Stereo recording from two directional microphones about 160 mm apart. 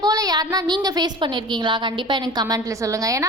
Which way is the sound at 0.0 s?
25° right (ahead or behind).